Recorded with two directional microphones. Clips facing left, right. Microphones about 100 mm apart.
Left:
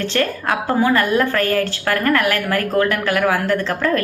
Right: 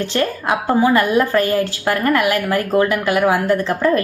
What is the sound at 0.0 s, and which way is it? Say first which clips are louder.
A woman's voice: right 1 dB; 15° right (ahead or behind).